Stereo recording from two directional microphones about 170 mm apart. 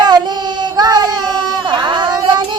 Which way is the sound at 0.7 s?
25° right (ahead or behind).